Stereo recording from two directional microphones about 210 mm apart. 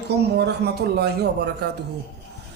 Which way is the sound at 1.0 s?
50° right (ahead or behind).